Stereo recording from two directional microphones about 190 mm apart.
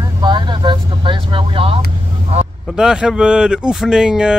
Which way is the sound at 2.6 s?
Centre (ahead or behind).